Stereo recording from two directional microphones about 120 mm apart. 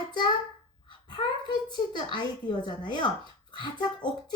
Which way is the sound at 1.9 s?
40° left (ahead or behind).